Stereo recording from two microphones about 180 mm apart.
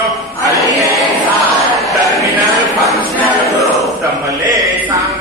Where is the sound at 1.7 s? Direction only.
Centre (ahead or behind).